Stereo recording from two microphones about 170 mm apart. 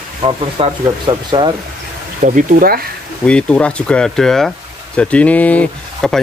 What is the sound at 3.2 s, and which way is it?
Speech, 5° left (ahead or behind).